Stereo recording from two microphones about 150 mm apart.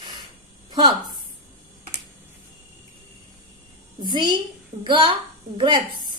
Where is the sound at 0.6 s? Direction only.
30° right (ahead or behind).